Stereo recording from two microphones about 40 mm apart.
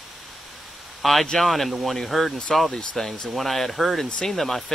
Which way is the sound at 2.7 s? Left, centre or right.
Centre.